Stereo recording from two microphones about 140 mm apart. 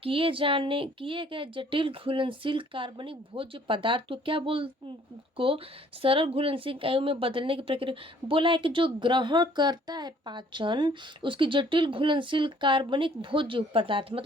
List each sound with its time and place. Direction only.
0.0 s speech: 40° right (ahead or behind)